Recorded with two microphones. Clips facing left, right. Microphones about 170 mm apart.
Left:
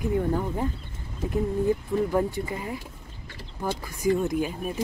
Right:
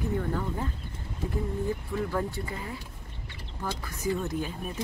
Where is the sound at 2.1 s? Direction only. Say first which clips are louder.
Left 6 dB; 20° left (ahead or behind).